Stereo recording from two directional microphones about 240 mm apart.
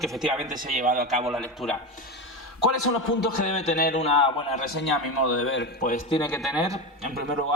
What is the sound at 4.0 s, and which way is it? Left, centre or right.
Speech, left.